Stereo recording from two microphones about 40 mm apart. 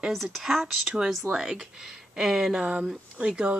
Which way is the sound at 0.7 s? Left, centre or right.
Centre.